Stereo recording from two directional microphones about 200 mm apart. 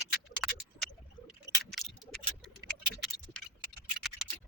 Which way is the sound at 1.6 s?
Centre (ahead or behind).